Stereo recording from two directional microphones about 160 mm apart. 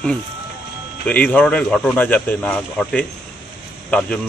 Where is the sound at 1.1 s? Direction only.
10° left (ahead or behind).